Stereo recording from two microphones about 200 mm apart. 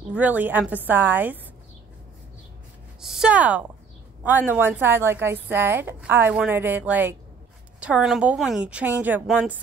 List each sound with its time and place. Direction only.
0.1 s speech: 10° right (ahead or behind)
3.0 s a woman's voice: 5° right (ahead or behind)